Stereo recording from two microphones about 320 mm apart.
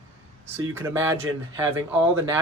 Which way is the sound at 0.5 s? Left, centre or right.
Centre.